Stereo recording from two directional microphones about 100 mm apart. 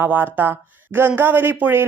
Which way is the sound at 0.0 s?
20° right (ahead or behind).